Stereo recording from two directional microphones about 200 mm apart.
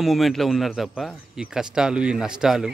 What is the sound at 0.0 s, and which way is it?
Speech, centre (ahead or behind).